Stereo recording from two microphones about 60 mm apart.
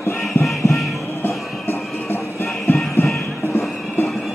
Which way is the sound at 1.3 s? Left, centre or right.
Left.